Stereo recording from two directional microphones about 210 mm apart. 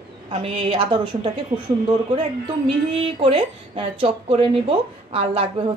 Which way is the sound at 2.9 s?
25° right (ahead or behind).